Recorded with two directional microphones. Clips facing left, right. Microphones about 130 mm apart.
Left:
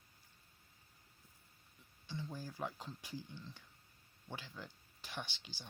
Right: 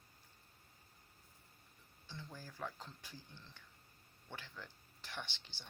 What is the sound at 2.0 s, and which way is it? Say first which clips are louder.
Speech: left 6 dB; 15° left (ahead or behind).